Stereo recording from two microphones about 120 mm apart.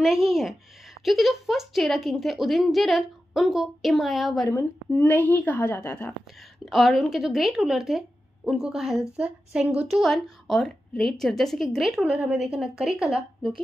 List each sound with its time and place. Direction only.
0.0 s a woman's voice: 5° right (ahead or behind)
4.5 s a woman's voice: 20° left (ahead or behind)
6.6 s a woman's voice: centre (ahead or behind)